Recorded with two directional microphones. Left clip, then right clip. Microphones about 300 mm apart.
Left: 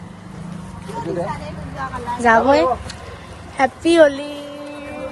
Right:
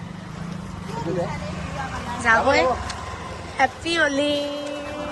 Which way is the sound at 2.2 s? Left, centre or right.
Centre.